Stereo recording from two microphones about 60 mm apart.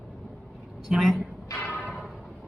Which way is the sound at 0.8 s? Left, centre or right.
Centre.